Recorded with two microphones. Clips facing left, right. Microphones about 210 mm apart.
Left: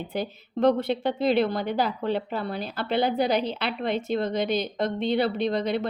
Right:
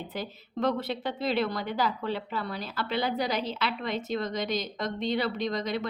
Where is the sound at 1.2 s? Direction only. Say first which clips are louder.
Left 5 dB; 55° left (ahead or behind).